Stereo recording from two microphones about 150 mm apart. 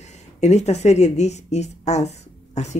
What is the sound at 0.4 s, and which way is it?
Speech, 45° left (ahead or behind).